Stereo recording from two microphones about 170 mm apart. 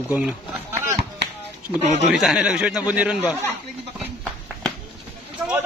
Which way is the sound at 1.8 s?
45° right (ahead or behind).